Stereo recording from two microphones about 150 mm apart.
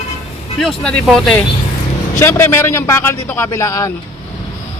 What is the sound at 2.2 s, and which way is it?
Speech, 15° left (ahead or behind).